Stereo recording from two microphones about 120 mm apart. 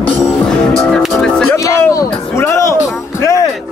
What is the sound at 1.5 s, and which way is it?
Speech, 25° left (ahead or behind).